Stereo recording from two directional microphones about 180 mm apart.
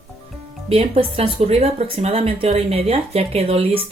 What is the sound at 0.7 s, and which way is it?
Speech, 35° right (ahead or behind).